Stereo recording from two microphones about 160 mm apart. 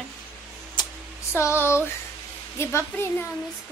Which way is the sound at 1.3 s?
15° left (ahead or behind).